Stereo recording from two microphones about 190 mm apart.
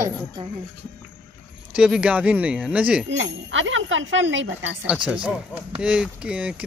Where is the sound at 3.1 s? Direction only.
90° right.